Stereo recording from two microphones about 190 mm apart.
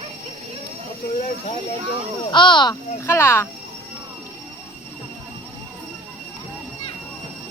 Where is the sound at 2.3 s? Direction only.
25° left (ahead or behind).